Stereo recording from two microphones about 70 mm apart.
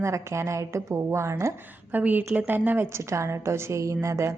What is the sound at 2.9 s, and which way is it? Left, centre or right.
A woman's voice, right.